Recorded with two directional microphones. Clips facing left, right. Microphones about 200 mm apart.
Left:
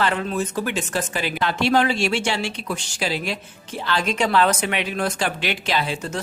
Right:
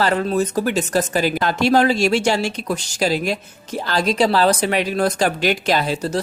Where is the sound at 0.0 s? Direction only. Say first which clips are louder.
Right 5 dB; 40° right (ahead or behind).